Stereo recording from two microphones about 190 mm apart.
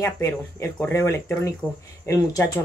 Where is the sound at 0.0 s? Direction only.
15° left (ahead or behind).